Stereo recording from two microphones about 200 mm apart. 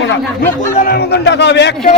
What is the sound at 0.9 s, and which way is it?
Speech, 55° left (ahead or behind).